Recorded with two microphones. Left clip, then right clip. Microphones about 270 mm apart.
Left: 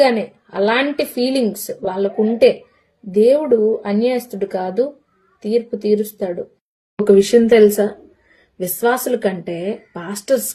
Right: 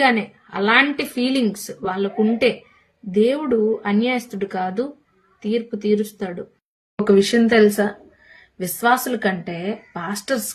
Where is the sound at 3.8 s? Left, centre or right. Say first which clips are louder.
Left 3 dB; centre.